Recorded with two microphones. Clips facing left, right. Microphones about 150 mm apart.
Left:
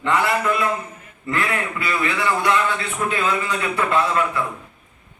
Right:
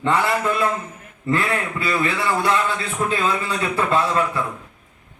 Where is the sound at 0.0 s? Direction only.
30° right (ahead or behind).